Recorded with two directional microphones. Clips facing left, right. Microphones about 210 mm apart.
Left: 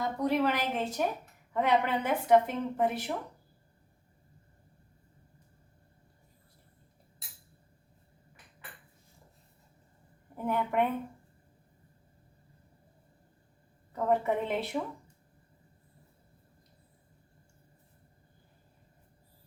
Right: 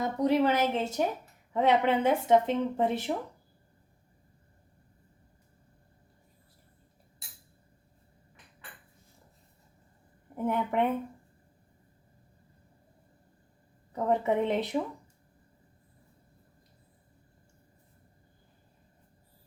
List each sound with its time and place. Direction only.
0.0 s speech: 20° right (ahead or behind)
10.3 s speech: 20° right (ahead or behind)
13.9 s speech: 20° right (ahead or behind)